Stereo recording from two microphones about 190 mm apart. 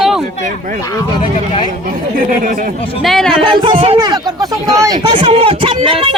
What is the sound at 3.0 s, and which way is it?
Speech, centre (ahead or behind).